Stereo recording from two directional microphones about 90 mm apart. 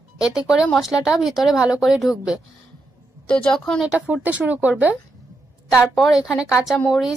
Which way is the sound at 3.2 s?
10° left (ahead or behind).